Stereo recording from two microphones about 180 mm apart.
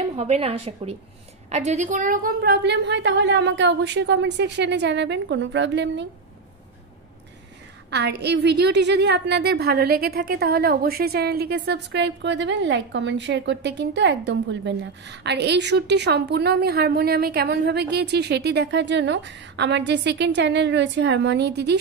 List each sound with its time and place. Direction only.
0.1 s a woman's voice: 35° right (ahead or behind); by 6.0 s 80° right
7.9 s a woman's voice: 70° right (ahead or behind)